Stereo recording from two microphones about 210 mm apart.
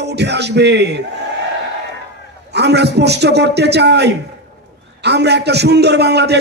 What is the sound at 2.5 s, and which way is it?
A man's voice, 55° right (ahead or behind).